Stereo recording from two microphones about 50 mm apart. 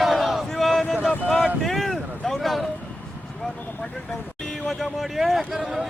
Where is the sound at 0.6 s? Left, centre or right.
Centre.